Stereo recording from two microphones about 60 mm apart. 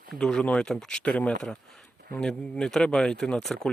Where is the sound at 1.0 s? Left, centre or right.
Left.